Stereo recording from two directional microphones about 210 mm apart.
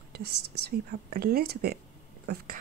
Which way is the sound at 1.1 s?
45° right (ahead or behind).